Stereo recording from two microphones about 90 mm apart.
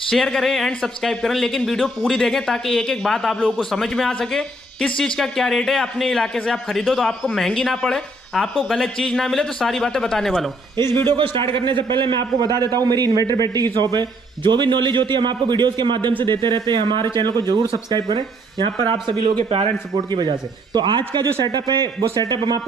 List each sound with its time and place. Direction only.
0.1 s speech: 5° left (ahead or behind)
11.1 s a man's voice: 70° right (ahead or behind)